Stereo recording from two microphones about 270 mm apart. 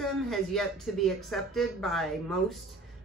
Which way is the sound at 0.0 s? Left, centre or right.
Centre.